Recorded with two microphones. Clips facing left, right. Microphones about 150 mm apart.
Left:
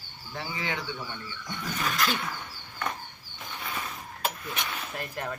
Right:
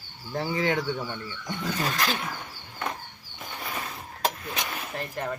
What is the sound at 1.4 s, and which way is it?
Speech, 30° right (ahead or behind).